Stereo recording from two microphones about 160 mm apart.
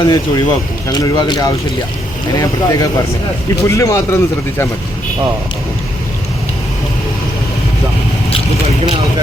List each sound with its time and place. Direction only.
0.0 s a man's voice: 25° left (ahead or behind)